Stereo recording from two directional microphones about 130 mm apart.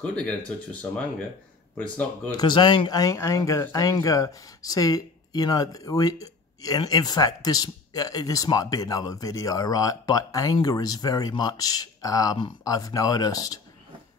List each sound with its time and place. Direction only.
1.8 s speech: 10° left (ahead or behind)
2.3 s speech: 35° left (ahead or behind)